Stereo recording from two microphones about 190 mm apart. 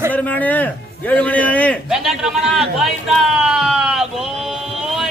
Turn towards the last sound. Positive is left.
turn(degrees=-5)  # may be behind; listen again after turning